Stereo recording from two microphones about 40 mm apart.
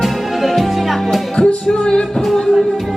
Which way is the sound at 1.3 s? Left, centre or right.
Left.